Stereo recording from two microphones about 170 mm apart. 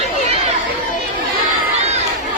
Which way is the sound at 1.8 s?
40° right (ahead or behind).